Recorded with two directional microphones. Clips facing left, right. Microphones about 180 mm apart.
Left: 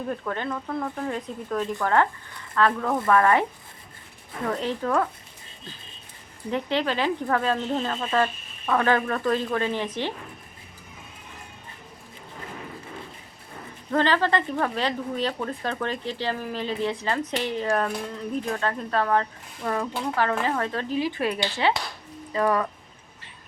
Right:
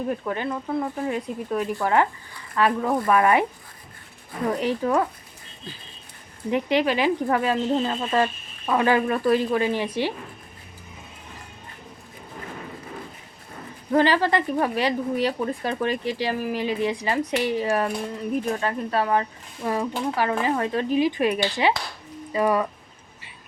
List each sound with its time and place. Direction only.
0.1 s speech: 10° right (ahead or behind)
4.4 s speech: 10° right (ahead or behind)
6.5 s speech: 15° right (ahead or behind)
13.9 s speech: 10° right (ahead or behind)